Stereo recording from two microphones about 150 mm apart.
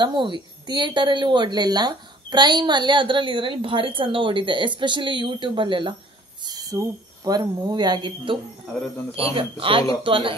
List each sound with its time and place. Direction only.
0.0 s a woman's voice: 30° right (ahead or behind)